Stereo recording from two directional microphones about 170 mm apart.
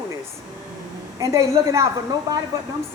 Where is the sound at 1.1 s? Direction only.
20° right (ahead or behind).